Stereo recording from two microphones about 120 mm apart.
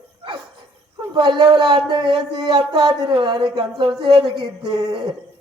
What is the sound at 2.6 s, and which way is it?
A woman's voice, 55° right (ahead or behind).